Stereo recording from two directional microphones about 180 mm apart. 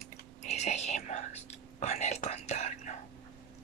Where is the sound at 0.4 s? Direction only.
40° left (ahead or behind).